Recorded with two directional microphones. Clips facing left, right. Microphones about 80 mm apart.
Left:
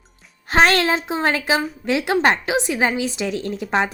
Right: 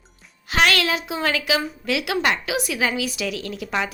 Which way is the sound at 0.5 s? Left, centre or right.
Left.